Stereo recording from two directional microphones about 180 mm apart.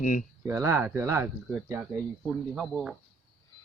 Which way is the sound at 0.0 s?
45° left (ahead or behind).